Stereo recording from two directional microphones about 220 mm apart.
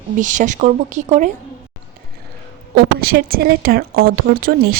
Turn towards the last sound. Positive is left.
turn(degrees=-40)  # may be behind; listen again after turning